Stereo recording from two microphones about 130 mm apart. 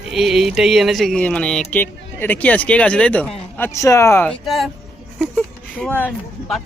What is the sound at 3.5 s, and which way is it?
Speech, 20° left (ahead or behind).